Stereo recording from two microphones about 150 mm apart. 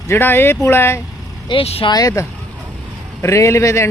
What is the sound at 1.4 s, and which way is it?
Speech, 40° left (ahead or behind).